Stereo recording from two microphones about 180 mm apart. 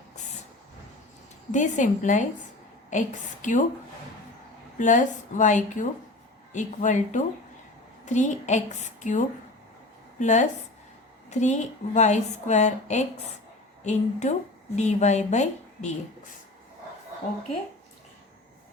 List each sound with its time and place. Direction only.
1.5 s a woman's voice: 40° left (ahead or behind)
4.8 s a woman's voice: 45° left (ahead or behind)